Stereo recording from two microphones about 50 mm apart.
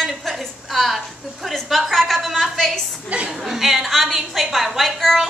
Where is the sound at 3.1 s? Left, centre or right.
Right.